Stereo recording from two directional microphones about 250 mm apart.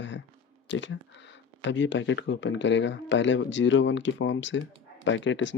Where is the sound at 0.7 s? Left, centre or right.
Left.